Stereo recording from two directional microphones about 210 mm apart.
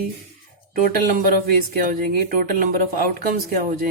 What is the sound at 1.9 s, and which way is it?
Speech, 40° right (ahead or behind).